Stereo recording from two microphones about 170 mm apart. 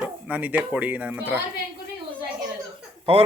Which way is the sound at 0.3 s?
10° right (ahead or behind).